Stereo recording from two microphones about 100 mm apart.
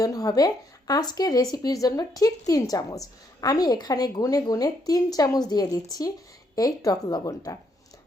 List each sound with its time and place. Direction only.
0.0 s a woman's voice: 35° left (ahead or behind)